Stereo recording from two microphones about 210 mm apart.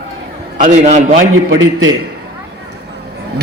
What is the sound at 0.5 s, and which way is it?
Speech, 35° right (ahead or behind).